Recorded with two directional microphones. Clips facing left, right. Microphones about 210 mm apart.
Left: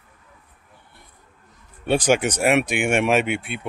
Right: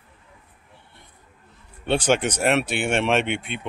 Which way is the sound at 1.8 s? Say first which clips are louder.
Left 2 dB; 10° left (ahead or behind).